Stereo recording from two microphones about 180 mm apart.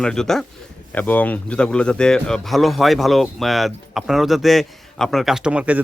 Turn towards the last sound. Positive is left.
turn(degrees=-5)  # may be behind; listen again after turning